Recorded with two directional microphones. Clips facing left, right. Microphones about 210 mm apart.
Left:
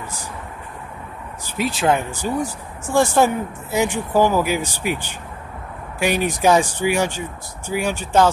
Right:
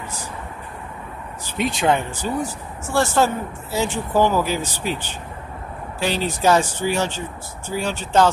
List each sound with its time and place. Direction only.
1.6 s speech: 5° left (ahead or behind)